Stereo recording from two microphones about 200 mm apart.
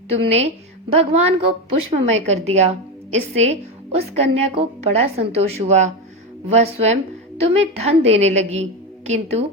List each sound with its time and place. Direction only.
0.9 s a woman's voice: 30° right (ahead or behind)